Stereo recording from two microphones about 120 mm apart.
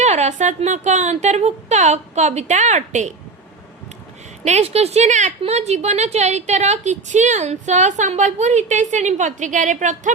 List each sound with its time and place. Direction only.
0.0 s a woman's voice: 70° right (ahead or behind)
4.4 s a woman's voice: 65° right (ahead or behind)
5.4 s a woman's voice: 65° right (ahead or behind); by 10.1 s 90° right